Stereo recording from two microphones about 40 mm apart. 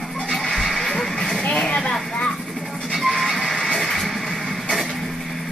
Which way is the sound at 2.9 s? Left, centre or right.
Centre.